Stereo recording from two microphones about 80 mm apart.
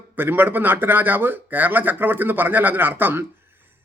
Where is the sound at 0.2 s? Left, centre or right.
Right.